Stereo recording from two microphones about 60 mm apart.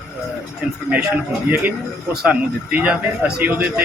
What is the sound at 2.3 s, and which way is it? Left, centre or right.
Speech, centre.